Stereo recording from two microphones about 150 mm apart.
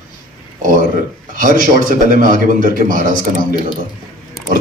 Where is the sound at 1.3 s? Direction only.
65° right (ahead or behind).